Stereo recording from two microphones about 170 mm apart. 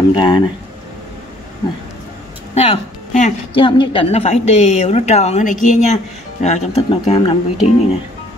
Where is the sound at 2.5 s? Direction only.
35° left (ahead or behind).